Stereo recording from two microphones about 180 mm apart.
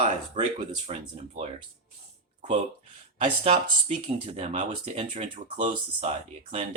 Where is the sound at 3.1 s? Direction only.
30° right (ahead or behind).